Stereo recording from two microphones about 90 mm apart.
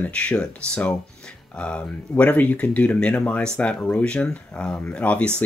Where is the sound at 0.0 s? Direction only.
15° left (ahead or behind).